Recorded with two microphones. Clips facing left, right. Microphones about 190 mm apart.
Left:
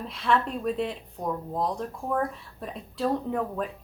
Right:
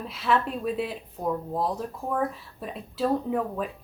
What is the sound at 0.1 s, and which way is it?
Speech, 5° right (ahead or behind).